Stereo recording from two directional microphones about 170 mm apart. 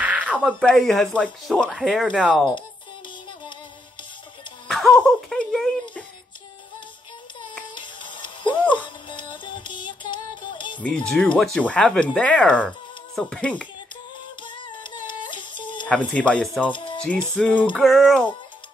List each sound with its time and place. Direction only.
0.0 s a sound: 10° right (ahead or behind)
0.5 s speech: 5° left (ahead or behind)
4.6 s music: centre (ahead or behind)
7.7 s music: 30° left (ahead or behind)
11.1 s speech: 5° left (ahead or behind)
14.4 s a sound: 30° left (ahead or behind)
15.9 s speech: 5° left (ahead or behind)
16.7 s music: 30° left (ahead or behind)
17.0 s speech: 10° left (ahead or behind)